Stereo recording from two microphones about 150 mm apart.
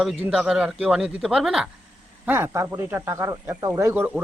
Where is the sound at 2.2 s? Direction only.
15° right (ahead or behind).